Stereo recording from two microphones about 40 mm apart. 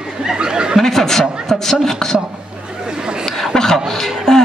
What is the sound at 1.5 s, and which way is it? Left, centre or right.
Beatboxing, centre.